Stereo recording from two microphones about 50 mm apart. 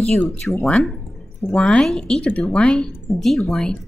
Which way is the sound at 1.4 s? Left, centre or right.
Left.